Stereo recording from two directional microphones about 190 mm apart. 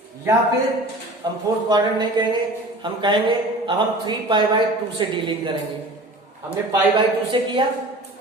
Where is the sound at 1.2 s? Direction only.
20° right (ahead or behind).